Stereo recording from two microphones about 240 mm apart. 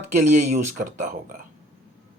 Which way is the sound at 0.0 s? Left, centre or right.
Right.